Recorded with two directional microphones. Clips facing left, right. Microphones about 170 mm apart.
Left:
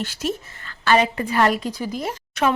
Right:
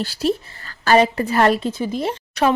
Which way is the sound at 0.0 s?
35° right (ahead or behind).